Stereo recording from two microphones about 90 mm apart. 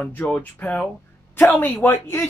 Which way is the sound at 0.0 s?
15° left (ahead or behind).